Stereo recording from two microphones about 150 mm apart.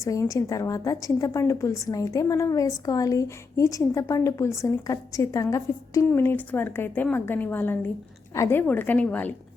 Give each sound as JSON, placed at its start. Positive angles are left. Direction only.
{"t": 0.0, "sound": "a woman's voice", "side_deg": 20}